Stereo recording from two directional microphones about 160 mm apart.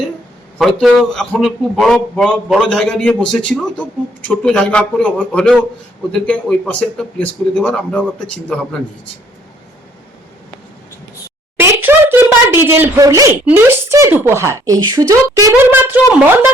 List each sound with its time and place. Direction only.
0.6 s a man's voice: centre (ahead or behind)
11.5 s a sound: 15° right (ahead or behind)
12.6 s a man's voice: 15° right (ahead or behind)
15.5 s a woman's voice: 15° right (ahead or behind)